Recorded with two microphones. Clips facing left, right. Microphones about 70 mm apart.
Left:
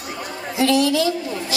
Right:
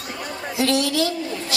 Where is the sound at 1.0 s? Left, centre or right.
Left.